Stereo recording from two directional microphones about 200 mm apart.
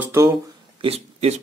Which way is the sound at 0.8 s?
30° right (ahead or behind).